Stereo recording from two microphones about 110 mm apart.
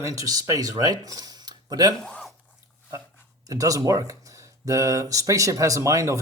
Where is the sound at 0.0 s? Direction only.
30° right (ahead or behind).